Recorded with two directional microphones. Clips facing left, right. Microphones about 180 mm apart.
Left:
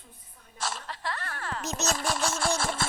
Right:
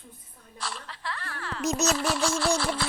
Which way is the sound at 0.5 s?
45° left (ahead or behind).